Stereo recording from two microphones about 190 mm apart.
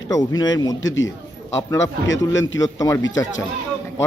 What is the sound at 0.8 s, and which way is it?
Speech, 85° left.